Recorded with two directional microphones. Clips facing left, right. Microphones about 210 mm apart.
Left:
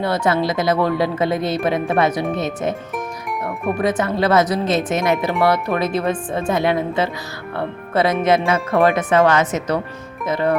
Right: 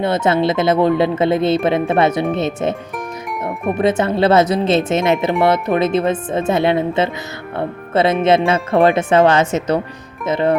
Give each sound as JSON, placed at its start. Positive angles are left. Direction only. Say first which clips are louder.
{"t": 0.0, "sound": "speech", "louder": "right 3 dB", "side_deg": -20}
{"t": 3.8, "sound": "speech", "louder": "right 4 dB", "side_deg": -25}